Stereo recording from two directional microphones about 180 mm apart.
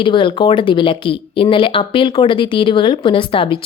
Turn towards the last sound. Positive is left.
turn(degrees=30)  # may be behind; listen again after turning